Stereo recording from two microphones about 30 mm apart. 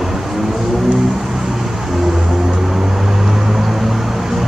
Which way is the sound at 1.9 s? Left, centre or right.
Centre.